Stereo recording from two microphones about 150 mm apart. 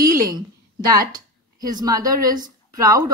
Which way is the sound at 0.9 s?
25° right (ahead or behind).